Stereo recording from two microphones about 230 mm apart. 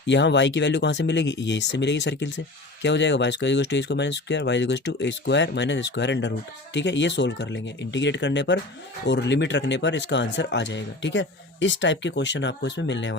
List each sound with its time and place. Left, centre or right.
0.0 s speech: left